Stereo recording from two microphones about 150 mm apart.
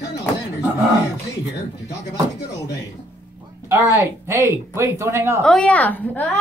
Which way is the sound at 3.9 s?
20° right (ahead or behind).